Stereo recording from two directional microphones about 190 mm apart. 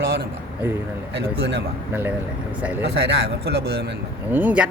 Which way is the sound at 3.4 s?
60° right (ahead or behind).